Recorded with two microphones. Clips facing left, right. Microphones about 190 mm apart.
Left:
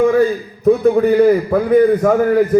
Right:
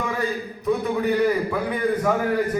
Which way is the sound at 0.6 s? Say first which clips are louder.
Left 11 dB; 45° left (ahead or behind).